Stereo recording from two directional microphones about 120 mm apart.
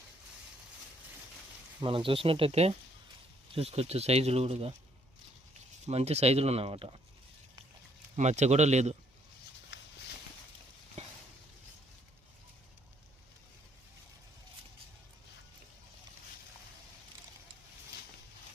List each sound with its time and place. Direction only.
1.8 s speech: 45° right (ahead or behind)
5.8 s speech: 60° right (ahead or behind)
8.1 s speech: 75° right (ahead or behind)